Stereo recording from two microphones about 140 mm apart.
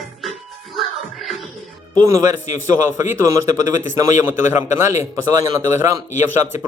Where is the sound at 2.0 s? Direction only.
25° right (ahead or behind).